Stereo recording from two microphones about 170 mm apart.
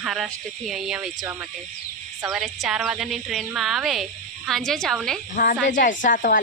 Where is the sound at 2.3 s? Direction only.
Centre (ahead or behind).